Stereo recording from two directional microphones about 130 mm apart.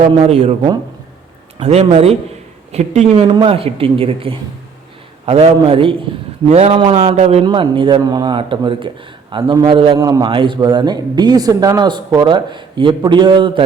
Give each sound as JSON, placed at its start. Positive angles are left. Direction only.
{"t": 0.0, "sound": "a man's voice", "side_deg": -55}
{"t": 1.5, "sound": "speech", "side_deg": -55}
{"t": 2.7, "sound": "a man's voice", "side_deg": -60}
{"t": 3.2, "sound": "speech", "side_deg": -40}
{"t": 6.5, "sound": "a man's voice", "side_deg": -55}
{"t": 6.7, "sound": "speech", "side_deg": -45}
{"t": 7.4, "sound": "speech", "side_deg": -40}
{"t": 10.0, "sound": "speech", "side_deg": -30}